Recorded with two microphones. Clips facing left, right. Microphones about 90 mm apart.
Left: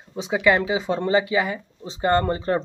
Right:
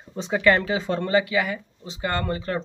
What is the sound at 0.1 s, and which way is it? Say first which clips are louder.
Speech: even; 10° left (ahead or behind).